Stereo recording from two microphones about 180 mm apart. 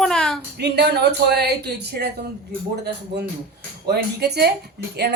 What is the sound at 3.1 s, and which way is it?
Speech, 65° right (ahead or behind).